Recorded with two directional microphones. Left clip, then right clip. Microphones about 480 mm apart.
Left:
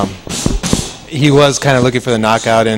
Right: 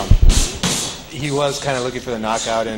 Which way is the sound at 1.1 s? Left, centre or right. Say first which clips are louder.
Left 10 dB; left.